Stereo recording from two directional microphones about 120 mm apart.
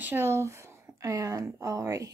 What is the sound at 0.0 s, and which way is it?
Speech, 15° right (ahead or behind).